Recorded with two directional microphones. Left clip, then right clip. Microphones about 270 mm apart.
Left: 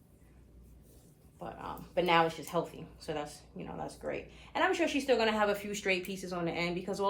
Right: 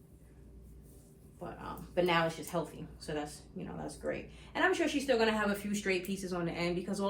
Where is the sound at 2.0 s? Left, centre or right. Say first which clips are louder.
Left 5 dB; left.